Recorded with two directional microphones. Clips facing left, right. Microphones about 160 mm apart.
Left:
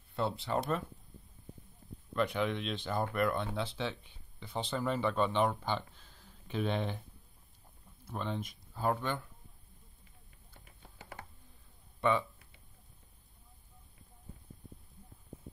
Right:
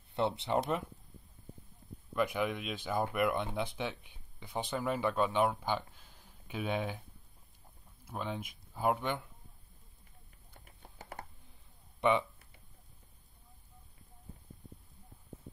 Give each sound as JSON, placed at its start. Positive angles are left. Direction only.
{"t": 0.1, "sound": "speech", "side_deg": -20}
{"t": 2.1, "sound": "speech", "side_deg": -10}
{"t": 8.0, "sound": "speech", "side_deg": -10}
{"t": 11.0, "sound": "computer keyboard", "side_deg": -40}
{"t": 12.0, "sound": "speech", "side_deg": -20}